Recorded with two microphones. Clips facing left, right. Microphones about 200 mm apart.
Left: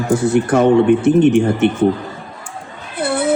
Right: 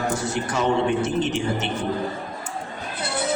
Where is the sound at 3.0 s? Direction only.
55° left (ahead or behind).